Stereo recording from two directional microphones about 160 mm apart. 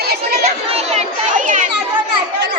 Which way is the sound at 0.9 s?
50° right (ahead or behind).